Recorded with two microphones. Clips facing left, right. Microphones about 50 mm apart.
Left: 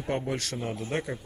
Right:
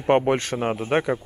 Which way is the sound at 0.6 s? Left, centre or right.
Right.